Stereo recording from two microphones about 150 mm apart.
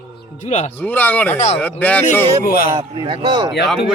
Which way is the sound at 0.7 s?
10° left (ahead or behind).